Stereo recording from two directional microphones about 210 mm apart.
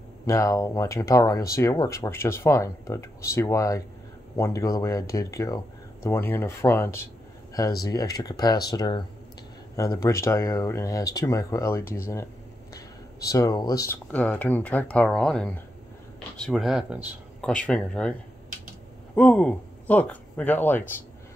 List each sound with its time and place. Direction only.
0.3 s speech: 15° left (ahead or behind)
13.3 s speech: 15° left (ahead or behind)
19.1 s speech: 5° left (ahead or behind)